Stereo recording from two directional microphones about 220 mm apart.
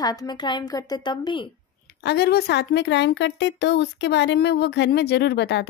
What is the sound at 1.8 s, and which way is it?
Speech, 50° left (ahead or behind).